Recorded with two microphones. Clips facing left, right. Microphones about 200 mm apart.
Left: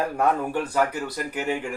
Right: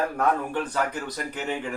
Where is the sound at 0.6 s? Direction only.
10° left (ahead or behind).